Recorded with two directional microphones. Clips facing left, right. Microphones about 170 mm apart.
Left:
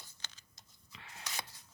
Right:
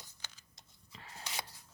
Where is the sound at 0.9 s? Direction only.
35° right (ahead or behind).